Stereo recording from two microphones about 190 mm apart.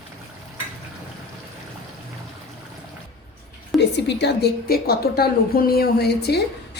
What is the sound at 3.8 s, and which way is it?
A woman's voice, 65° left (ahead or behind).